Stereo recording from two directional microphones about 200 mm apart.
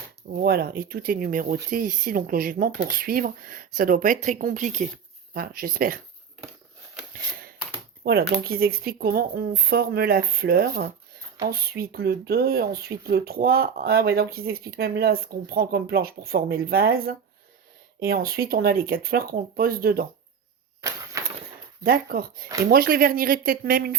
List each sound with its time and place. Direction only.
0.3 s speech: 50° right (ahead or behind)
8.0 s speech: 50° right (ahead or behind)
20.8 s a sound: 15° right (ahead or behind)
21.8 s speech: 45° right (ahead or behind)